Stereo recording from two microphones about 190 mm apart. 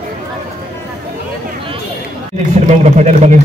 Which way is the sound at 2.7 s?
40° right (ahead or behind).